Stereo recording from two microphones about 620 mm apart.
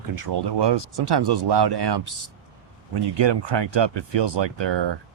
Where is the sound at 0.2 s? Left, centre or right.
Right.